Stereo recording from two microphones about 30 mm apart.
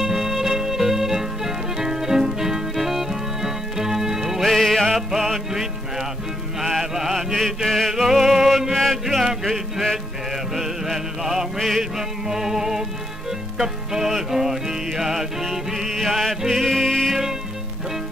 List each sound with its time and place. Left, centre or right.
0.0 s music: centre
4.5 s music: centre
4.8 s music: centre
5.5 s music: centre
6.6 s mantra: centre
7.4 s chant: centre
7.9 s music: centre
9.0 s music: centre
16.6 s music: centre